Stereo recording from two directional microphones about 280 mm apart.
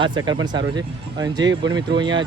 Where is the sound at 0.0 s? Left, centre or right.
Centre.